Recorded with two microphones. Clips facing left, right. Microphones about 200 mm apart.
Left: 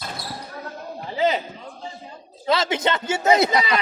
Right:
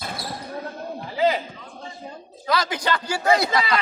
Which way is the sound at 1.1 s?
20° left (ahead or behind).